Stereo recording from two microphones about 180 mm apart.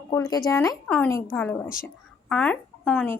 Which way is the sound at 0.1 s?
20° left (ahead or behind).